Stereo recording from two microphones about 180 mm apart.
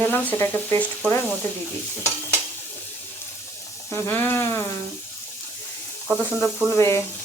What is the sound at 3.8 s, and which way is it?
Speech, 15° left (ahead or behind).